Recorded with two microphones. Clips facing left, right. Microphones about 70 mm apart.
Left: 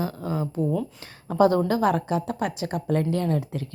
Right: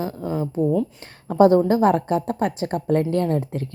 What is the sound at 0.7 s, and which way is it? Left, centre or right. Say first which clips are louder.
Speech: right 5 dB; centre.